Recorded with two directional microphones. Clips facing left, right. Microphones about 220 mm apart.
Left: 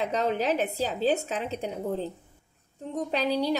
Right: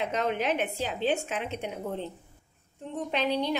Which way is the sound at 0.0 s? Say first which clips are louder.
Left 2 dB; 35° left (ahead or behind).